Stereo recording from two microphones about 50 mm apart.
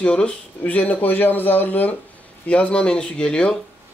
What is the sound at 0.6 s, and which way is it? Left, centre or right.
Speech, left.